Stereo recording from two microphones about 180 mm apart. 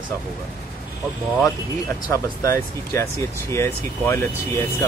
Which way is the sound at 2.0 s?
15° left (ahead or behind).